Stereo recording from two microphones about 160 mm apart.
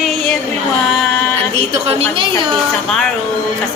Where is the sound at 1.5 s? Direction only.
35° right (ahead or behind).